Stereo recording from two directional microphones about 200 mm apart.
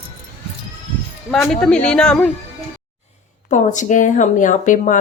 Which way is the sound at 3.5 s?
35° left (ahead or behind).